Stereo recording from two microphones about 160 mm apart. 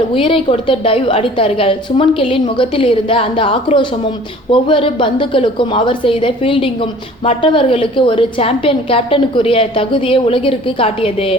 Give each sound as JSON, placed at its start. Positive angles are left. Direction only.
{"t": 0.1, "sound": "a woman's voice", "side_deg": 35}